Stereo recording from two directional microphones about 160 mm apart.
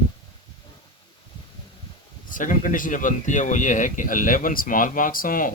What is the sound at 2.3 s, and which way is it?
Speech, 55° left (ahead or behind).